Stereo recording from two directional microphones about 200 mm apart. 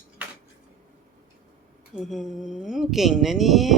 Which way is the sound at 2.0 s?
Centre (ahead or behind).